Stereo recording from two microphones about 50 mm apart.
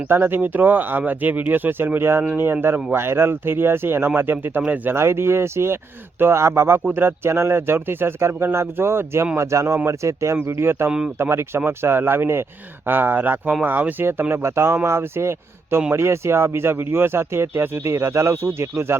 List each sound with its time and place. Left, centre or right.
0.1 s speech: right
2.0 s speech: right
4.9 s speech: right
9.4 s speech: right
9.7 s speech: right
10.4 s speech: right
14.0 s speech: right
14.4 s speech: right